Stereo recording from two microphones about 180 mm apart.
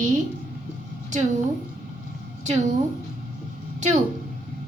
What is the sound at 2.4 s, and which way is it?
Speech, 40° right (ahead or behind).